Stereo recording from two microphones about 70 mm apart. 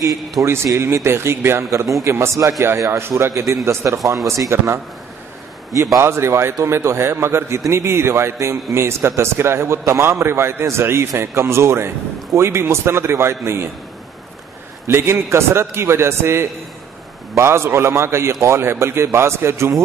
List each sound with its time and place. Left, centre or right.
0.4 s a man's voice: right
5.9 s a man's voice: right
14.9 s a man's voice: right